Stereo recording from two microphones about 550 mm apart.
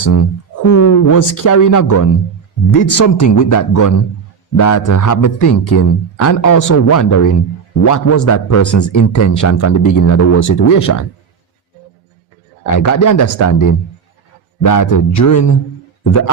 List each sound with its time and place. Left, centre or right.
0.0 s a man's voice: left
12.6 s a man's voice: left